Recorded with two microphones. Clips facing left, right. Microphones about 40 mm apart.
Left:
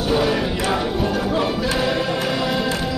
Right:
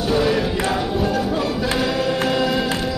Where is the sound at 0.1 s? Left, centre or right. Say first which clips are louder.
Right 1 dB; centre.